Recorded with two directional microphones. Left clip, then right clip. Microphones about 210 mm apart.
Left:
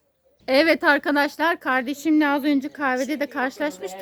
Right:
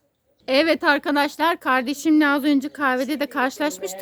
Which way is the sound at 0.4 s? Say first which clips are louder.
Left 1 dB; 5° right (ahead or behind).